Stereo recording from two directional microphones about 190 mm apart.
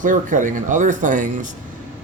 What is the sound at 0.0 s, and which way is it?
Speech, 40° right (ahead or behind).